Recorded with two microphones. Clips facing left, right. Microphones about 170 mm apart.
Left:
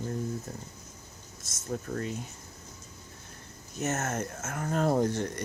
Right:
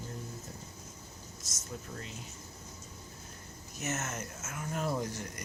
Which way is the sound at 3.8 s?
50° left (ahead or behind).